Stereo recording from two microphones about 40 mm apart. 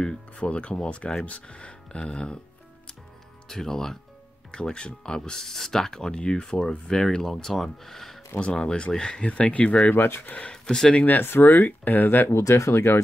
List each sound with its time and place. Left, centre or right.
0.0 s speech: left
1.5 s a sound: left
3.4 s speech: centre
4.5 s speech: left; by 8.2 s centre
8.5 s speech: left
10.5 s speech: centre
11.1 s speech: left
12.3 s speech: left